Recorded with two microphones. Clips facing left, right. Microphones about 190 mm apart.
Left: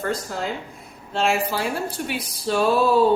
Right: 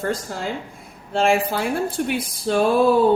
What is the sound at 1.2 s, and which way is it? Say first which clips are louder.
Speech: right 3 dB; 55° right (ahead or behind).